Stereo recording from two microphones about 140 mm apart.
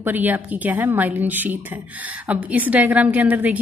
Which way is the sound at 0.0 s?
15° right (ahead or behind).